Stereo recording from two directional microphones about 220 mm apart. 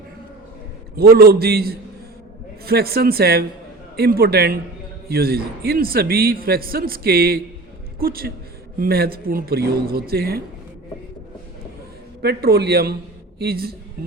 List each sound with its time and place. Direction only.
0.9 s a man's voice: 45° right (ahead or behind)
12.2 s a man's voice: 45° right (ahead or behind)